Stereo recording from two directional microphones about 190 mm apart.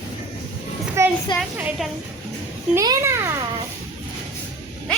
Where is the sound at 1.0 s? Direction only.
15° right (ahead or behind).